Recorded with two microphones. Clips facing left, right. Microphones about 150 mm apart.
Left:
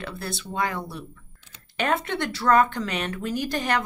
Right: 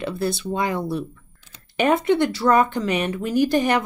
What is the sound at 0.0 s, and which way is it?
Speech, 15° right (ahead or behind).